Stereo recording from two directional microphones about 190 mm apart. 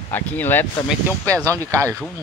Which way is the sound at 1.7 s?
15° right (ahead or behind).